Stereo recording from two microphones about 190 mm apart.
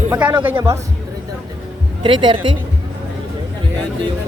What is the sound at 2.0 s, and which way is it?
Speech, 25° right (ahead or behind).